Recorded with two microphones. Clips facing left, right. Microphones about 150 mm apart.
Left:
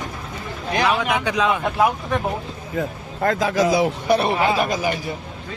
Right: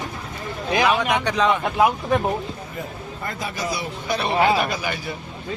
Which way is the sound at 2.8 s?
85° left.